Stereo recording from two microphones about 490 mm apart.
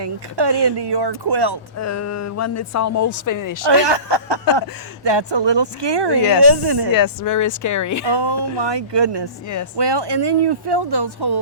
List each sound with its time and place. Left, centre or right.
0.0 s speech: right
1.8 s speech: left
3.7 s speech: right
6.9 s speech: left
8.0 s speech: right